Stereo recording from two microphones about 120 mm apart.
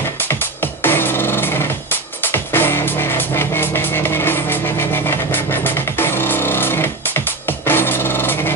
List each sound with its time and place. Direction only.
0.6 s music: 15° left (ahead or behind)